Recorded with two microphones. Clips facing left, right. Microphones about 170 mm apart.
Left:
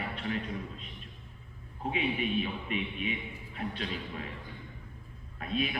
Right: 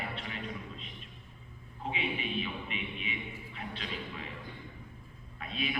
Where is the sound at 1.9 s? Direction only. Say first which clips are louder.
Left 5 dB; 45° left (ahead or behind).